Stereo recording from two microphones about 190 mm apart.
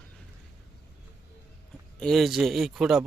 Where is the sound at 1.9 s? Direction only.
Centre (ahead or behind).